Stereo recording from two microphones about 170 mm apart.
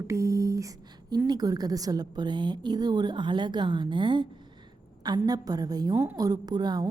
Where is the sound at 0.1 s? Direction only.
20° right (ahead or behind).